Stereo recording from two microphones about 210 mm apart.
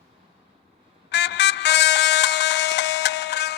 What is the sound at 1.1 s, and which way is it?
Vehicle horn, 55° left (ahead or behind).